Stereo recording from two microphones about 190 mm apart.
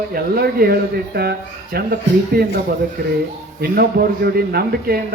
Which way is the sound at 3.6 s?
55° right (ahead or behind).